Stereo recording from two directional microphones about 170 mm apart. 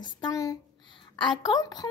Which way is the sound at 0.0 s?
25° left (ahead or behind).